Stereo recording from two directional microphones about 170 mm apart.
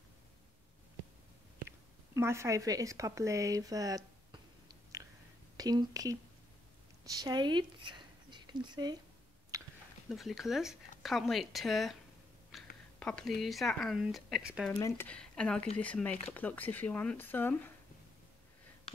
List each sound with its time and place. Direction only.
2.1 s speech: 15° right (ahead or behind)
4.9 s whispering: 20° right (ahead or behind)
5.6 s speech: 20° right (ahead or behind)
7.2 s speech: 25° right (ahead or behind)
9.5 s a sound: 20° right (ahead or behind)
10.0 s speech: centre (ahead or behind)
12.5 s a sound: centre (ahead or behind)
13.0 s speech: centre (ahead or behind)
14.8 s speech: 20° left (ahead or behind)
15.0 s speech: 5° left (ahead or behind)